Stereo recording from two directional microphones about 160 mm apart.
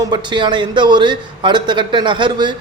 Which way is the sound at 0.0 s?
30° right (ahead or behind).